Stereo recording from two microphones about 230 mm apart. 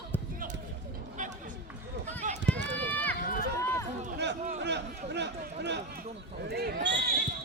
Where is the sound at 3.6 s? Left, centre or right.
Centre.